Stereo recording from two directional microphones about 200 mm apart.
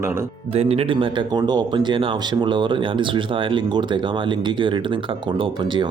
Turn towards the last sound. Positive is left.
turn(degrees=-25)  # may be behind; listen again after turning